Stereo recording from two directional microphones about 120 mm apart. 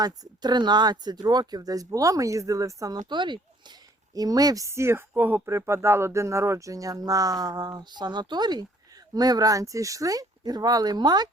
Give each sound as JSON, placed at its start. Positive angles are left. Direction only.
{"t": 0.0, "sound": "speech", "side_deg": -35}
{"t": 3.1, "sound": "speech", "side_deg": -40}